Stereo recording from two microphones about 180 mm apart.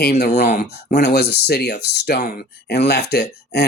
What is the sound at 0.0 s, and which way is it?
Speech, 60° left (ahead or behind).